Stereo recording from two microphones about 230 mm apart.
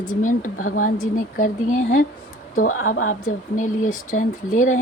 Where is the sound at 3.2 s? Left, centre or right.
Left.